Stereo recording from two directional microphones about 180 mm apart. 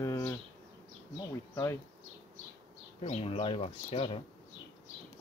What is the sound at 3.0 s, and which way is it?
Speech, 35° left (ahead or behind).